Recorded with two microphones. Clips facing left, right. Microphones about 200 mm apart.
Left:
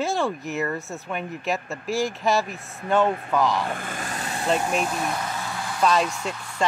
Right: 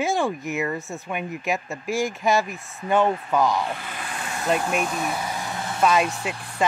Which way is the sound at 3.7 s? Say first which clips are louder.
Left 2 dB; 50° left (ahead or behind).